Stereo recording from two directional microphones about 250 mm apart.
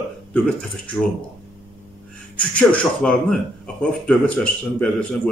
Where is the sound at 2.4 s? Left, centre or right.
Centre.